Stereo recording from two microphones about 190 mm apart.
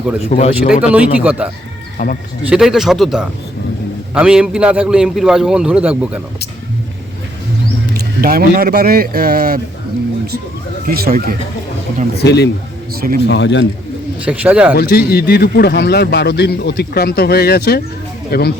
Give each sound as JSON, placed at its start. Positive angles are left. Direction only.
{"t": 0.2, "sound": "speech", "side_deg": 35}
{"t": 0.7, "sound": "speech", "side_deg": -5}
{"t": 2.0, "sound": "speech", "side_deg": 50}
{"t": 2.5, "sound": "a man's voice", "side_deg": 0}
{"t": 7.9, "sound": "speech", "side_deg": -50}
{"t": 10.8, "sound": "speech", "side_deg": -55}
{"t": 12.1, "sound": "speech", "side_deg": 60}
{"t": 13.0, "sound": "speech", "side_deg": -55}
{"t": 13.2, "sound": "speech", "side_deg": 70}
{"t": 14.3, "sound": "speech", "side_deg": -5}
{"t": 14.8, "sound": "speech", "side_deg": 55}